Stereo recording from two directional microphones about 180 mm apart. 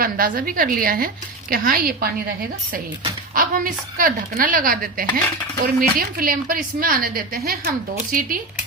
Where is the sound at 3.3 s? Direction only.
50° right (ahead or behind).